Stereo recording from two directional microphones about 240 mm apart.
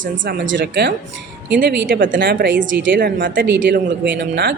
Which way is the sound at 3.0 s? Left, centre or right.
Right.